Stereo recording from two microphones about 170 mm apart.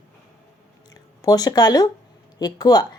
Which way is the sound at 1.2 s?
20° left (ahead or behind).